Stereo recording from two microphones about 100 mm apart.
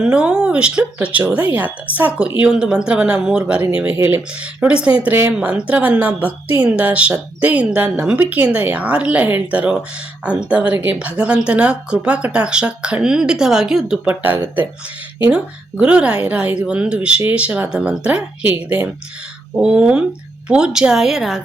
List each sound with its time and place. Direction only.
0.0 s a woman's voice: 10° right (ahead or behind)
14.1 s speech: 20° right (ahead or behind)
15.8 s a woman's voice: 10° right (ahead or behind)